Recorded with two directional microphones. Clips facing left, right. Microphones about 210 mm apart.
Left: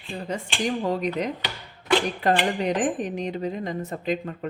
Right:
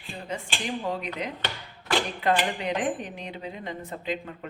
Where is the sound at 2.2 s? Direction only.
45° left (ahead or behind).